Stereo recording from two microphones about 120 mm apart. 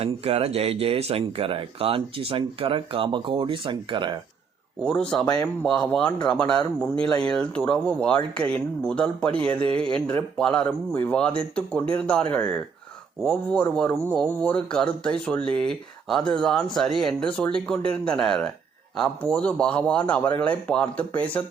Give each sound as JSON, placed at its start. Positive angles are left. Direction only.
{"t": 0.0, "sound": "speech", "side_deg": -55}
{"t": 4.8, "sound": "speech", "side_deg": 10}
{"t": 5.2, "sound": "speech", "side_deg": 35}
{"t": 5.6, "sound": "speech", "side_deg": 5}